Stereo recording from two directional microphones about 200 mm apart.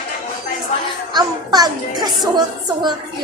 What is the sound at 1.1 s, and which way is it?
A child's voice, 20° right (ahead or behind).